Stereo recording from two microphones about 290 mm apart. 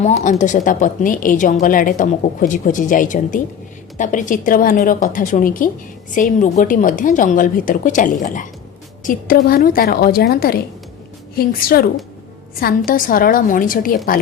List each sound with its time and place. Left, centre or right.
0.0 s a woman's voice: left